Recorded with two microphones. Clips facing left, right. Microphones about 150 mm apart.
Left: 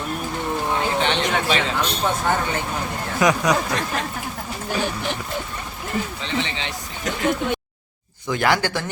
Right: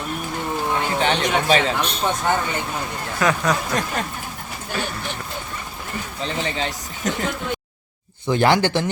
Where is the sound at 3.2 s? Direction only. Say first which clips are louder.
Left 2 dB; 15° left (ahead or behind).